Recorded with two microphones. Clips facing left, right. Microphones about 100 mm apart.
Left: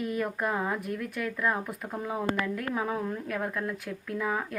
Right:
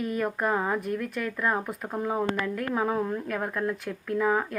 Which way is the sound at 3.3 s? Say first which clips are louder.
Right 3 dB; 5° right (ahead or behind).